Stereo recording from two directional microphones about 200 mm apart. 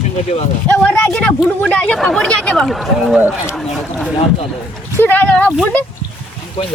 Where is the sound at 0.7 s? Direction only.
5° left (ahead or behind).